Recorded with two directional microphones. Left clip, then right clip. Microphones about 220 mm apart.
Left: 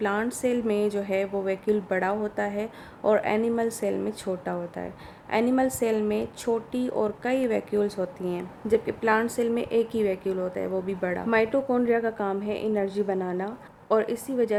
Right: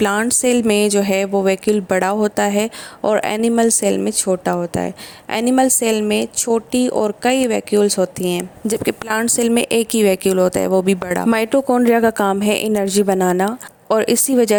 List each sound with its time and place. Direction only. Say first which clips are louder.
0.0 s a woman's voice: right 10 dB; 45° right (ahead or behind)